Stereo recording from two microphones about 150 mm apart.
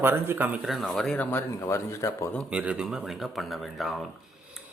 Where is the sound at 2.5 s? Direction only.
5° right (ahead or behind).